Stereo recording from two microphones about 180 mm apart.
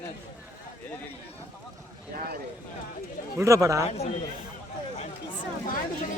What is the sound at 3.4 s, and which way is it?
Speech, 15° right (ahead or behind).